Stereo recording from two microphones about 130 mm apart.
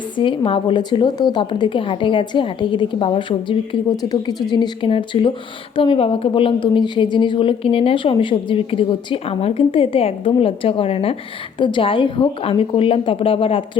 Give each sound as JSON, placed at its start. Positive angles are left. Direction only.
{"t": 0.2, "sound": "a woman's voice", "side_deg": 40}